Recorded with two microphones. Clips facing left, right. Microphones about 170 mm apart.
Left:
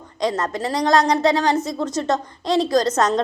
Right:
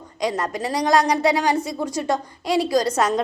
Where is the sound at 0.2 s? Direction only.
10° right (ahead or behind).